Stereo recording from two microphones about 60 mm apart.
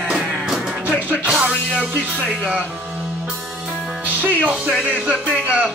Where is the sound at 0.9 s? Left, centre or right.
Right.